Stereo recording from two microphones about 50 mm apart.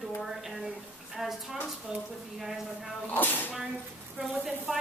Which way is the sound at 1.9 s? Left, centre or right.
Centre.